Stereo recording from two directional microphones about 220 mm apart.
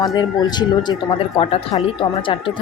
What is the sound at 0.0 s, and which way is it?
A woman's voice, 15° left (ahead or behind).